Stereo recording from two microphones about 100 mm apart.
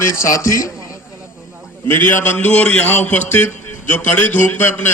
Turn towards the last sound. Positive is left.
turn(degrees=25)  # may be behind; listen again after turning